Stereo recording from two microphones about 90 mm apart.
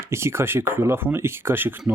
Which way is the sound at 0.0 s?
30° right (ahead or behind).